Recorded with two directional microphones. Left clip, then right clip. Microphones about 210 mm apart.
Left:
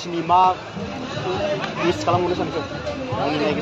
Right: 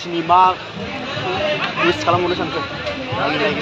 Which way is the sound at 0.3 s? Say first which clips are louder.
Right 3 dB; 10° right (ahead or behind).